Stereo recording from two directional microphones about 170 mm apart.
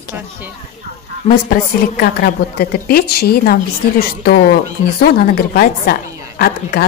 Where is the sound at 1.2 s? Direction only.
60° left (ahead or behind).